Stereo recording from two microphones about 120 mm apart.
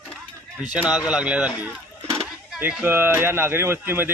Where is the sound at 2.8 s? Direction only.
15° right (ahead or behind).